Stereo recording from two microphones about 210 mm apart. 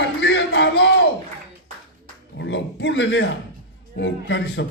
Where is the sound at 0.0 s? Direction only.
60° left (ahead or behind).